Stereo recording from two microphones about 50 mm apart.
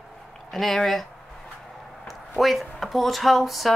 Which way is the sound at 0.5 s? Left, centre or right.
Centre.